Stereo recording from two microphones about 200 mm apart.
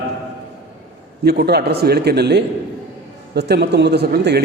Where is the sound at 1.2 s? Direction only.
55° right (ahead or behind).